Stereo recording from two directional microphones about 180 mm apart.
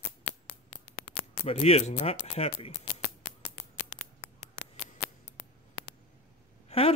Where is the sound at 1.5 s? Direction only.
35° left (ahead or behind).